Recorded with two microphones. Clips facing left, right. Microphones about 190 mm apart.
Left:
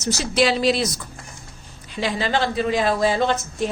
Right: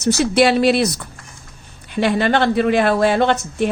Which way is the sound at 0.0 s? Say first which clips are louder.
Right 6 dB; 60° right (ahead or behind).